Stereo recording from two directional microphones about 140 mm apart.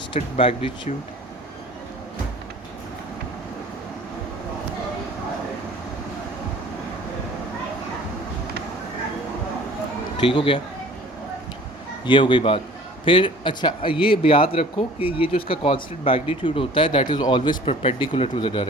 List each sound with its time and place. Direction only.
0.2 s speech: 40° left (ahead or behind)
10.2 s speech: 40° left (ahead or behind)
12.0 s speech: 35° left (ahead or behind)